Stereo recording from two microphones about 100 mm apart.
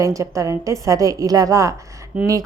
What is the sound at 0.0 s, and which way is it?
A woman's voice, 35° right (ahead or behind).